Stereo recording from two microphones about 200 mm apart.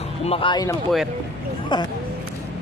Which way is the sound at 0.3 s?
25° left (ahead or behind).